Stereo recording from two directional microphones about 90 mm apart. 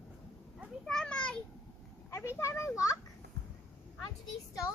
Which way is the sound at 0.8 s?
10° left (ahead or behind).